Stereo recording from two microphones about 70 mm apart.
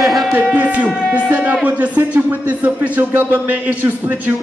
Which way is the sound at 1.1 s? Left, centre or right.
Centre.